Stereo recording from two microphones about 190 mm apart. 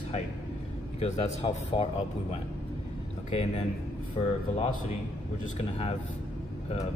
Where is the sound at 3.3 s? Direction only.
30° left (ahead or behind).